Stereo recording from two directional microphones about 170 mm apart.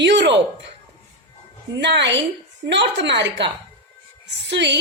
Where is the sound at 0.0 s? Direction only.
90° right.